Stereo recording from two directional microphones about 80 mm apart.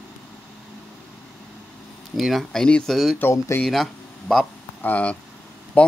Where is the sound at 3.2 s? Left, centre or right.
Left.